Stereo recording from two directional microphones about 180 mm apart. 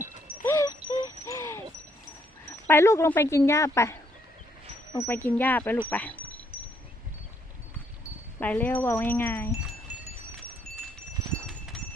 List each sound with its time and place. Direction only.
0.4 s music: 20° left (ahead or behind)
2.6 s speech: 15° left (ahead or behind)
4.9 s speech: 10° left (ahead or behind)
8.4 s speech: 10° left (ahead or behind)
11.4 s a sound: centre (ahead or behind)